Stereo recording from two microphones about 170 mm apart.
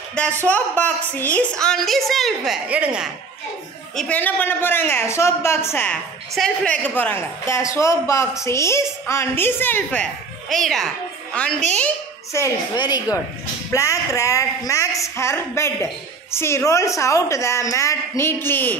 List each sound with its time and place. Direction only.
0.2 s a woman's voice: 5° left (ahead or behind)
3.9 s a woman's voice: 10° left (ahead or behind)
12.3 s a woman's voice: 20° left (ahead or behind)